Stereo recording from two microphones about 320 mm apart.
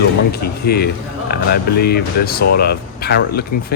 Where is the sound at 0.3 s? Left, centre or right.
Left.